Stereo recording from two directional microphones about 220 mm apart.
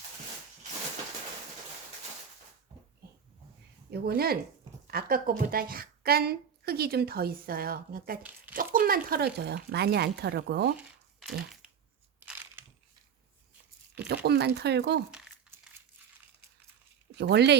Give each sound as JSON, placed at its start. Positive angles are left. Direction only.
{"t": 3.9, "sound": "a woman's voice", "side_deg": -45}
{"t": 10.8, "sound": "crumpling", "side_deg": -5}
{"t": 14.1, "sound": "a woman's voice", "side_deg": -50}
{"t": 15.1, "sound": "crumpling", "side_deg": -5}
{"t": 17.2, "sound": "a woman's voice", "side_deg": -50}